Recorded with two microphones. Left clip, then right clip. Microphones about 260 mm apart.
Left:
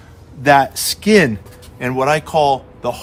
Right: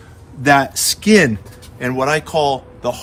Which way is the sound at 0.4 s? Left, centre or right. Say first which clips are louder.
Left 1 dB; left.